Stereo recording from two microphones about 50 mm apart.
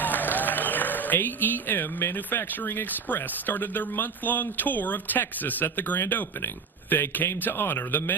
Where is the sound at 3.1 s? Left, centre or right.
Left.